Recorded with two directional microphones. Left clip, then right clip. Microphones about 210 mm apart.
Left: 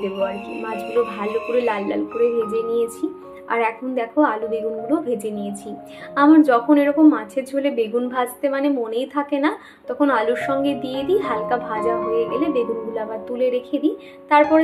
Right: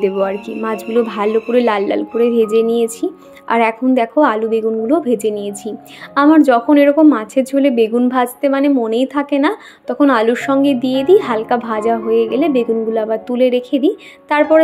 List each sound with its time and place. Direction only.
0.0 s speech: 45° right (ahead or behind)